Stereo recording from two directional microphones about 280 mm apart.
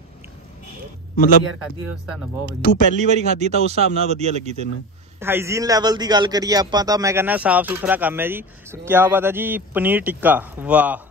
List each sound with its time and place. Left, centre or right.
1.1 s a man's voice: left
3.0 s speech: right
5.2 s a man's voice: centre